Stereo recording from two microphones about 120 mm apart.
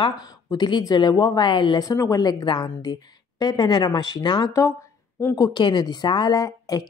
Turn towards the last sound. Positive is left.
turn(degrees=30)  # may be behind; listen again after turning